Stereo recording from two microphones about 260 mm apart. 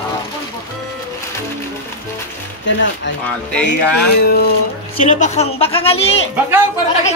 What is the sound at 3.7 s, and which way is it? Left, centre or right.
Speech, left.